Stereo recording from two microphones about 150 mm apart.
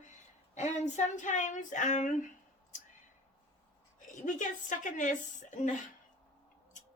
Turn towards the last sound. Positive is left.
turn(degrees=55)  # may be behind; listen again after turning